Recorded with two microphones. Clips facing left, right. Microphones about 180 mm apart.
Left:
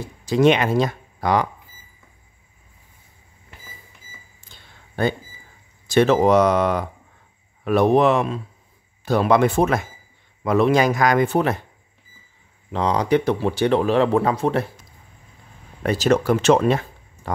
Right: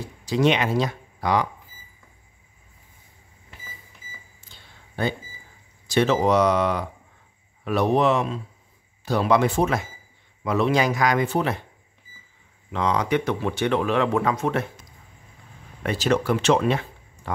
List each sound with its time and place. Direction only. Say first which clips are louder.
0.2 s speech: left 4 dB; 50° left (ahead or behind)
4.4 s a sound: left 2 dB; 50° left (ahead or behind)
5.9 s speech: left 4 dB; 55° left (ahead or behind)
12.7 s speech: left 4 dB; 35° left (ahead or behind)
15.8 s speech: left 4 dB; 40° left (ahead or behind)